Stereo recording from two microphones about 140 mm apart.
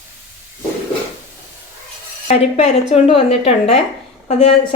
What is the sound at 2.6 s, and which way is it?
A woman's voice, 45° left (ahead or behind).